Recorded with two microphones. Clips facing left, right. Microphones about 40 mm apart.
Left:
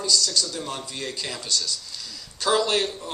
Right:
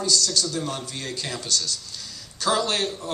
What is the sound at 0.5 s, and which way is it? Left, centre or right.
A man's voice, left.